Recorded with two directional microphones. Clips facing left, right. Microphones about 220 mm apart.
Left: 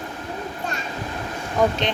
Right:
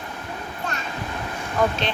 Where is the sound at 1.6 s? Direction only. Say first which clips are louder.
Left 2 dB; 20° left (ahead or behind).